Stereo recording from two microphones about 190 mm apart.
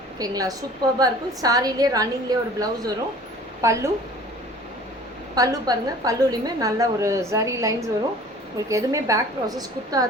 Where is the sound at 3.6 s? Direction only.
15° right (ahead or behind).